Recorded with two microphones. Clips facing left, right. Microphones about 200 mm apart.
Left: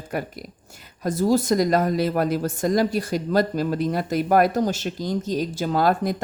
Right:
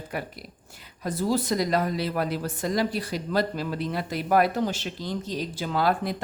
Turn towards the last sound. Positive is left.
turn(degrees=45)  # may be behind; listen again after turning